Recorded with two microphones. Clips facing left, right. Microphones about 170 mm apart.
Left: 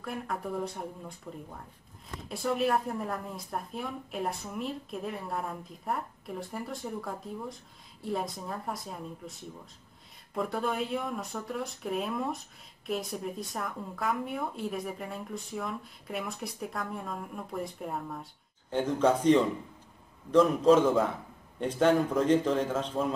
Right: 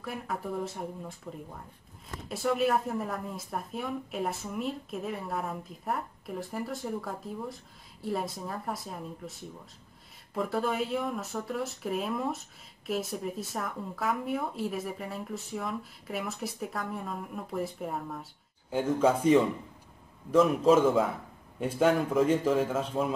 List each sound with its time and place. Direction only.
0.0 s speech: centre (ahead or behind)
2.2 s speech: centre (ahead or behind)
10.3 s a man's voice: centre (ahead or behind)